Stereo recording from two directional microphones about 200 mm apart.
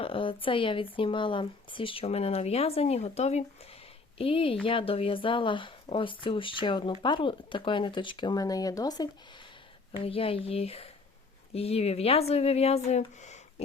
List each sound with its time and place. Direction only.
0.0 s speech: 25° left (ahead or behind)